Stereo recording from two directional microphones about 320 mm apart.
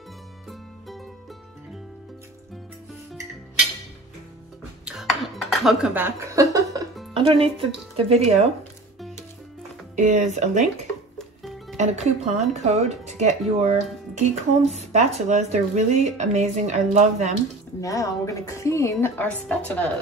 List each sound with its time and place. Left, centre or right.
0.5 s music: centre
4.8 s dishes: centre
7.2 s speech: centre
9.9 s speech: right
11.1 s music: centre
11.7 s speech: right
17.7 s speech: centre